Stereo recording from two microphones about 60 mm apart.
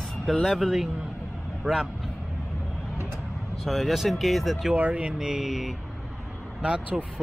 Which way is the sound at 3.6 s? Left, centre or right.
Centre.